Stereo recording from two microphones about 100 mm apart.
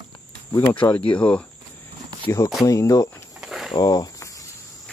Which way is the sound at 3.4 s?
5° right (ahead or behind).